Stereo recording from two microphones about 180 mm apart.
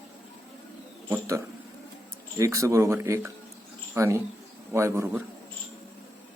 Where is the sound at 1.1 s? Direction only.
15° right (ahead or behind).